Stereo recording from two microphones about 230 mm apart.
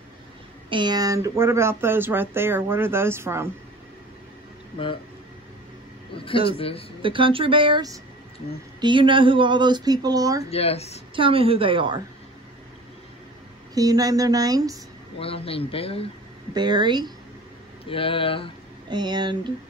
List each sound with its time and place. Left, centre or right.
0.7 s speech: centre
6.1 s speech: left
7.0 s speech: right
10.5 s speech: left
11.1 s speech: right
13.7 s speech: centre
15.1 s speech: left
16.5 s speech: centre
17.8 s speech: left
18.9 s speech: centre